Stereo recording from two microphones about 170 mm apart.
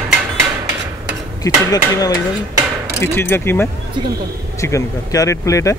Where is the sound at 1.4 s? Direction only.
20° left (ahead or behind).